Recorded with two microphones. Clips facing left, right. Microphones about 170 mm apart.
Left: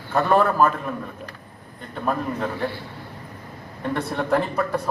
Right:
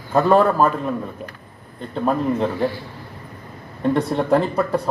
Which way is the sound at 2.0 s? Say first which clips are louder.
Right 5 dB; 20° right (ahead or behind).